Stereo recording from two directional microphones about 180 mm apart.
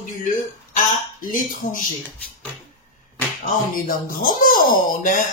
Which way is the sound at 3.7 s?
50° left (ahead or behind).